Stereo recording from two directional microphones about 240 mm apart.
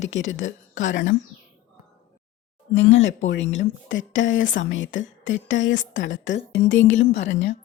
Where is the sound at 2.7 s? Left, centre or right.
Left.